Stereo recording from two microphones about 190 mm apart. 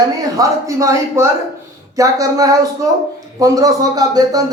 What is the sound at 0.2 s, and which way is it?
Speech, 15° right (ahead or behind).